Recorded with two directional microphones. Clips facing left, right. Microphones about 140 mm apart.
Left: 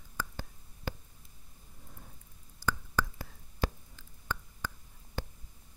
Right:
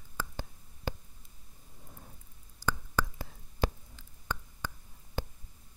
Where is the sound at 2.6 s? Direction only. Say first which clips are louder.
Even; 20° right (ahead or behind).